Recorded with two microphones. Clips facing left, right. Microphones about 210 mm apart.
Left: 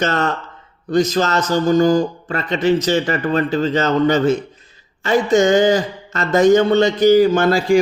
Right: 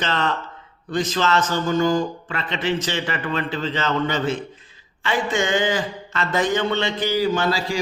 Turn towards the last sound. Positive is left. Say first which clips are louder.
# left 7 dB
turn(degrees=50)  # may be behind; listen again after turning